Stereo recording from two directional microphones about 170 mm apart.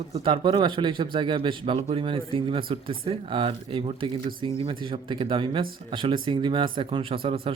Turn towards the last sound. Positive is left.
turn(degrees=-35)  # may be behind; listen again after turning